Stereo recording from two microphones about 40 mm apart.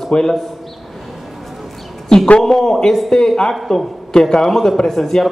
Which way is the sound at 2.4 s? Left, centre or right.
Centre.